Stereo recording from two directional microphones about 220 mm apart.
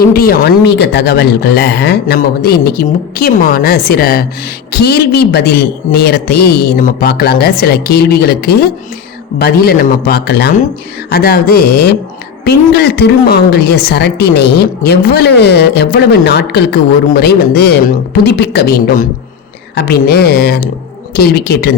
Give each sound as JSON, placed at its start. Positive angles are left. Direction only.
{"t": 0.0, "sound": "speech", "side_deg": 45}